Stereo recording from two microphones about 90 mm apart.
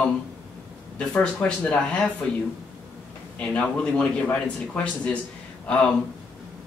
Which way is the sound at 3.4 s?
15° left (ahead or behind).